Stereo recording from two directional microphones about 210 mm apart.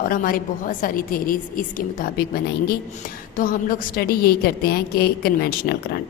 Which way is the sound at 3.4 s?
40° left (ahead or behind).